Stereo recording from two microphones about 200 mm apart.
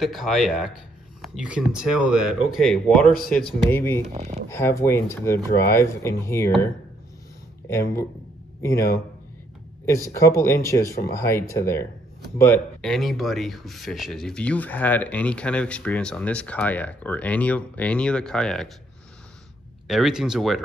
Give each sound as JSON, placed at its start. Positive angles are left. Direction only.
{"t": 0.0, "sound": "speech", "side_deg": 0}
{"t": 4.0, "sound": "speech", "side_deg": -35}
{"t": 4.5, "sound": "speech", "side_deg": 10}
{"t": 7.6, "sound": "speech", "side_deg": 15}
{"t": 12.8, "sound": "speech", "side_deg": 0}
{"t": 19.9, "sound": "speech", "side_deg": 0}